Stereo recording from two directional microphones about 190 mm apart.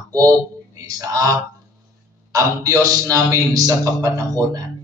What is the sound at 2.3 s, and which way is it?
A man's voice, 20° right (ahead or behind).